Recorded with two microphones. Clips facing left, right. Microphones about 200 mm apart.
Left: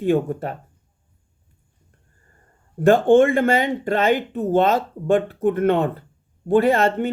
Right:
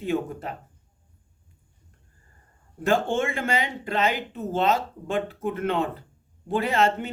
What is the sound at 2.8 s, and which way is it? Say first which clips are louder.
Speech: left 10 dB; 55° left (ahead or behind).